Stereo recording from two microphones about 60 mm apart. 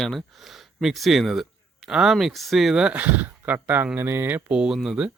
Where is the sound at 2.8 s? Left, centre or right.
Right.